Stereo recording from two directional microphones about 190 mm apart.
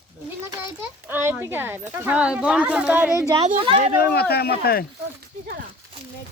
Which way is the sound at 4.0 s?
55° left (ahead or behind).